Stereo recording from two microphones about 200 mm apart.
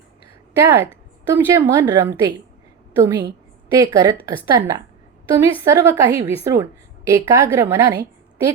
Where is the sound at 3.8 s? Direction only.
15° right (ahead or behind).